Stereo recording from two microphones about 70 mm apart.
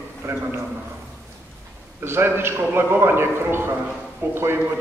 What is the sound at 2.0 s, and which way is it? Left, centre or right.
A man's voice, right.